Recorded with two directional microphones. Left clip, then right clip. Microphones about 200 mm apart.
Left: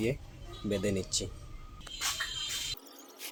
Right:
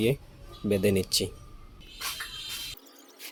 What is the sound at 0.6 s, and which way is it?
Speech, 25° right (ahead or behind).